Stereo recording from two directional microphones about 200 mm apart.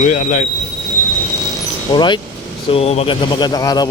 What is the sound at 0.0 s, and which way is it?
Speech, 40° left (ahead or behind).